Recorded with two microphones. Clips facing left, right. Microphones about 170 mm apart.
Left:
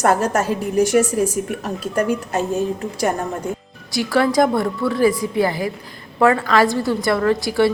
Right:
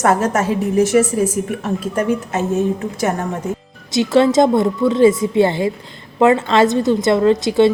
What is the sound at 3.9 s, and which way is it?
A woman's voice, 20° right (ahead or behind).